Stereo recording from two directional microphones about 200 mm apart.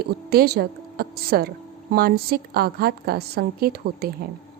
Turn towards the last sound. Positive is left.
turn(degrees=-50)  # may be behind; listen again after turning